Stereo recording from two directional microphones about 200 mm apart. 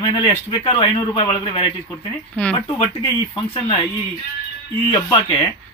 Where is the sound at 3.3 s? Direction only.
25° left (ahead or behind).